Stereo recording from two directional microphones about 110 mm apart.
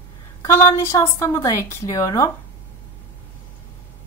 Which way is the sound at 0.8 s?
25° left (ahead or behind).